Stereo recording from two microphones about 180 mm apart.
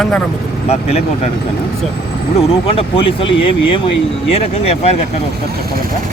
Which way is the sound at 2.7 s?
30° left (ahead or behind).